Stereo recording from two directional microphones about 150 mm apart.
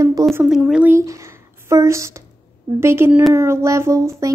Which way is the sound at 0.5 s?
5° right (ahead or behind).